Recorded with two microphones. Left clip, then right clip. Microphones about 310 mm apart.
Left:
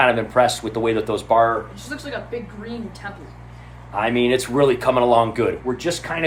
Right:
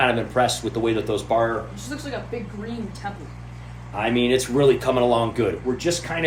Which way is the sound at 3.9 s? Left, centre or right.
Centre.